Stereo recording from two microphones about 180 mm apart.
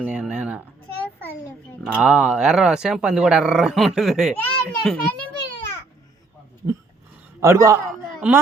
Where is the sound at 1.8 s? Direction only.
5° right (ahead or behind).